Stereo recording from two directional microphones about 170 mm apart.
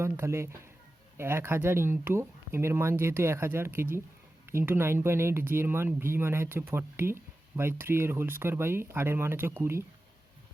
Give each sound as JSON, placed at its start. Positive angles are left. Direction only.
{"t": 0.0, "sound": "speech", "side_deg": -15}